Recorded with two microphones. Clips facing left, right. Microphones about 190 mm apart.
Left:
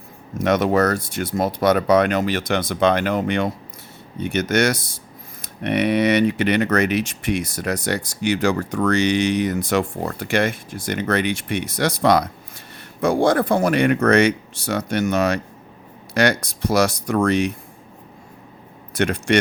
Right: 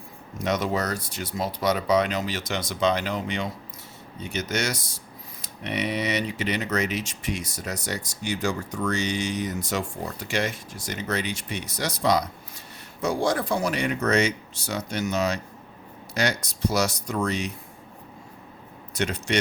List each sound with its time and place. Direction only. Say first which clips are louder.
0.4 s speech: left 8 dB; 60° left (ahead or behind)
18.9 s speech: left 7 dB; 60° left (ahead or behind)